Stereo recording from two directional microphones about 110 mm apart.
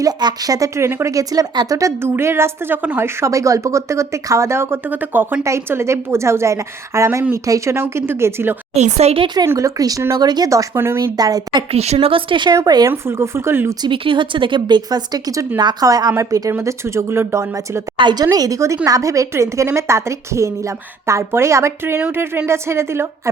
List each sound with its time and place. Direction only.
0.0 s speech: 40° right (ahead or behind); by 8.5 s 20° right (ahead or behind)
8.7 s speech: 75° right (ahead or behind)
9.2 s speech: 40° right (ahead or behind)
9.5 s speech: 30° right (ahead or behind)
11.7 s speech: 70° right (ahead or behind); by 12.5 s 45° right (ahead or behind)
12.5 s speech: 35° right (ahead or behind)
12.9 s speech: 25° right (ahead or behind)
13.8 s speech: 50° right (ahead or behind); by 17.8 s 25° right (ahead or behind)
17.9 s speech: 40° right (ahead or behind); by 23.3 s 25° right (ahead or behind)